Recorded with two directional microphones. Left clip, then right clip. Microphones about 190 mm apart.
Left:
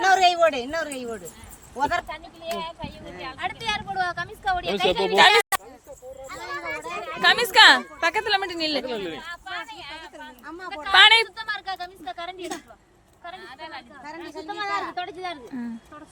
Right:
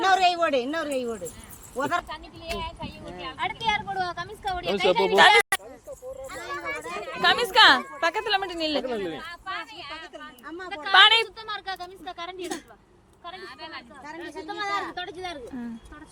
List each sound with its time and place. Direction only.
0.0 s speech: 35° left (ahead or behind)
2.6 s speech: 10° right (ahead or behind)
3.0 s speech: 10° left (ahead or behind)
6.2 s a sound: 5° left (ahead or behind)
7.2 s speech: 15° left (ahead or behind)
9.2 s a sound: 5° right (ahead or behind)
10.6 s speech: 10° left (ahead or behind)
13.4 s speech: 5° right (ahead or behind)
14.2 s speech: 15° right (ahead or behind)